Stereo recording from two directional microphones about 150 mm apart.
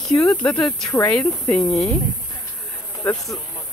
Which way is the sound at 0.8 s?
20° left (ahead or behind).